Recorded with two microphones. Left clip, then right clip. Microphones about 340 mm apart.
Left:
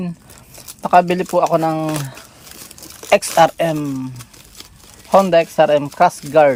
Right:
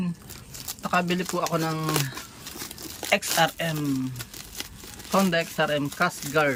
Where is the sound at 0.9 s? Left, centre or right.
Centre.